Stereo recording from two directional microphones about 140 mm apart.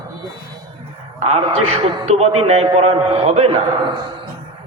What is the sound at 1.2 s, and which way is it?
A man's voice, 45° right (ahead or behind).